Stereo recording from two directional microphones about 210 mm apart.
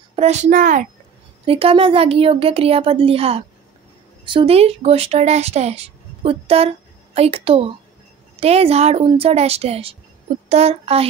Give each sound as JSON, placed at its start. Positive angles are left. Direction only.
{"t": 0.1, "sound": "a child's voice", "side_deg": -30}
{"t": 1.4, "sound": "speech", "side_deg": -25}